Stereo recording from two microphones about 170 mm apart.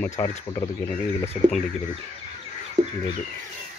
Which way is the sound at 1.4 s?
40° left (ahead or behind).